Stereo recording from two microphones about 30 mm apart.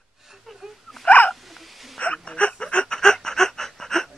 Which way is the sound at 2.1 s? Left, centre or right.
Left.